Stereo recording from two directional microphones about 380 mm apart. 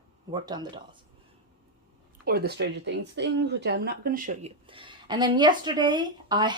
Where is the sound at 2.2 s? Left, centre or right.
Right.